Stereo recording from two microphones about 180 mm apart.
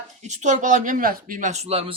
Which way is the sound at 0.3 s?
40° right (ahead or behind).